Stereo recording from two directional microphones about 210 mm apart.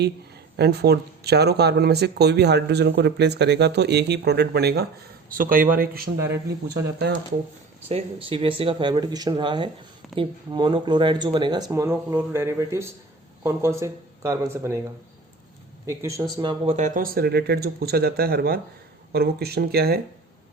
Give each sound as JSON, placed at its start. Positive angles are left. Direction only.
{"t": 0.5, "sound": "speech", "side_deg": -50}
{"t": 7.1, "sound": "speech", "side_deg": -50}
{"t": 7.9, "sound": "speech", "side_deg": -25}
{"t": 15.9, "sound": "speech", "side_deg": -15}
{"t": 16.4, "sound": "speech", "side_deg": -25}